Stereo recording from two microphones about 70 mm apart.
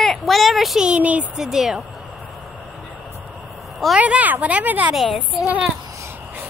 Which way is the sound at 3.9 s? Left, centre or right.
Centre.